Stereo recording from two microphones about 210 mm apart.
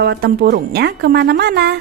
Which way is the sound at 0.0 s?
50° right (ahead or behind).